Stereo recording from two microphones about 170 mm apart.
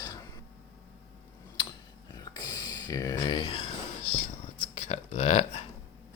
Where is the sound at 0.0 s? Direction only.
20° left (ahead or behind).